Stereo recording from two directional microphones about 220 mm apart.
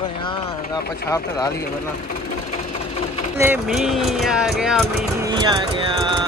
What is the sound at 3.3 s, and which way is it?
Speech, 5° right (ahead or behind).